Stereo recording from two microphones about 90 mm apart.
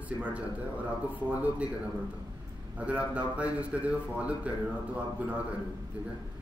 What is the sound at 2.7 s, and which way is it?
Speech, 15° right (ahead or behind).